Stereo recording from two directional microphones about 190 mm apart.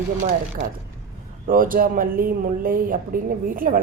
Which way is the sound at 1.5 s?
45° right (ahead or behind).